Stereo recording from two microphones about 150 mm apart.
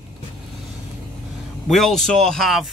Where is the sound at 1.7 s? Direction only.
Centre (ahead or behind).